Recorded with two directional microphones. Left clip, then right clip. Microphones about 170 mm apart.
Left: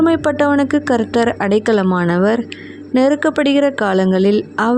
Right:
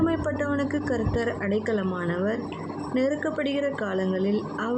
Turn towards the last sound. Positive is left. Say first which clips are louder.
# left 13 dB
turn(degrees=60)  # may be behind; listen again after turning